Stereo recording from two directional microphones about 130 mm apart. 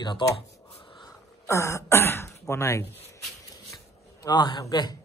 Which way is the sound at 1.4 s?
20° left (ahead or behind).